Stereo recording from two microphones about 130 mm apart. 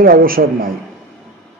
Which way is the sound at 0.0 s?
90° right.